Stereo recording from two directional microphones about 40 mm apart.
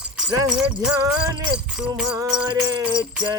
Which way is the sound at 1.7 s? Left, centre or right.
Centre.